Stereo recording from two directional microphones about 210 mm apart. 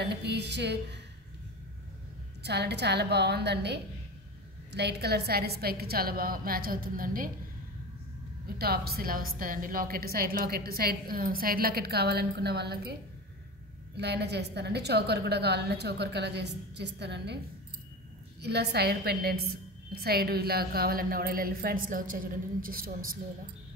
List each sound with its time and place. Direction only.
0.1 s speech: 55° right (ahead or behind)
2.4 s speech: 50° right (ahead or behind)
8.5 s speech: 45° right (ahead or behind)
13.9 s speech: 55° right (ahead or behind)
18.4 s speech: 50° right (ahead or behind)